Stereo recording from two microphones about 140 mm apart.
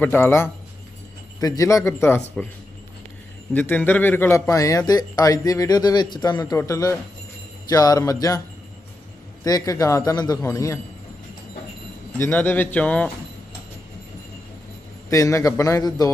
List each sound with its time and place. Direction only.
0.0 s speech: 15° left (ahead or behind)
3.5 s speech: 10° left (ahead or behind)
9.4 s speech: 25° left (ahead or behind)
12.2 s speech: 10° left (ahead or behind)
15.0 s speech: 20° left (ahead or behind)